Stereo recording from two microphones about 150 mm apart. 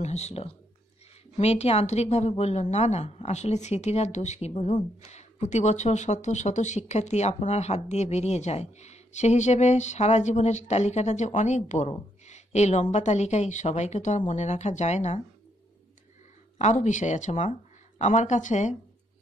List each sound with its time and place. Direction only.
0.0 s a woman's voice: 45° left (ahead or behind)
12.3 s a sound: 50° left (ahead or behind)
12.9 s a woman's voice: 50° left (ahead or behind)
16.5 s a woman's voice: 50° left (ahead or behind)